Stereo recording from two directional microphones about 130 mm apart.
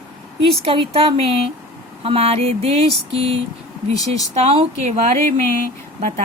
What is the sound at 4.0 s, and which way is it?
Speech, 30° left (ahead or behind).